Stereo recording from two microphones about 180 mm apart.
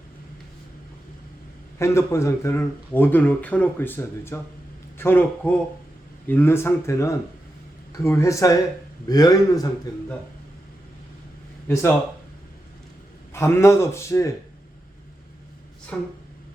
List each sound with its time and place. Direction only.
1.8 s a man's voice: 15° left (ahead or behind)
11.7 s speech: 15° left (ahead or behind)
13.3 s speech: 15° left (ahead or behind)
15.9 s a sound: 5° left (ahead or behind)